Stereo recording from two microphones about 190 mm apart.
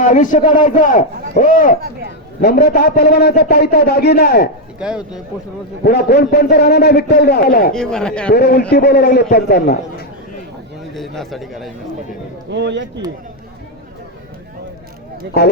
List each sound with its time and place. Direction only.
0.0 s a man's voice: 40° left (ahead or behind)
4.8 s a man's voice: 5° right (ahead or behind)
5.8 s a man's voice: 55° left (ahead or behind)
7.7 s a man's voice: 5° left (ahead or behind)
8.3 s a man's voice: 55° left (ahead or behind)
10.9 s a man's voice: centre (ahead or behind)
12.5 s speech: 65° right (ahead or behind)
15.3 s a man's voice: 60° left (ahead or behind)